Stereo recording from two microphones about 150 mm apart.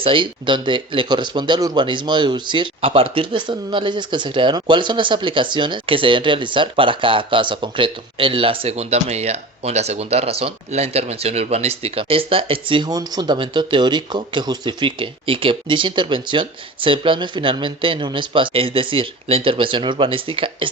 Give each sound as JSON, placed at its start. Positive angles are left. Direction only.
{"t": 0.0, "sound": "speech", "side_deg": -35}